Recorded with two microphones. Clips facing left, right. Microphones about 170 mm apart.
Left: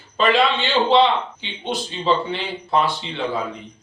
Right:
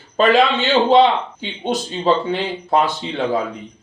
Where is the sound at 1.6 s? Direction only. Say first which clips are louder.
Right 5 dB; 45° right (ahead or behind).